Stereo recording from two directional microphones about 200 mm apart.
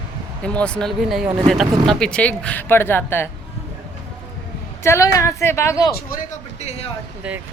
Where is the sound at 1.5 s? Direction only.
Centre (ahead or behind).